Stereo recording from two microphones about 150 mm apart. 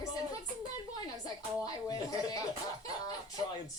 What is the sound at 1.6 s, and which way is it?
Speech, 25° left (ahead or behind).